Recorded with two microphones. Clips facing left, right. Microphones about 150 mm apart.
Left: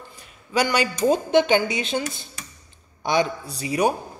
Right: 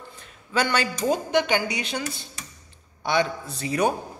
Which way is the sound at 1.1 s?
25° left (ahead or behind).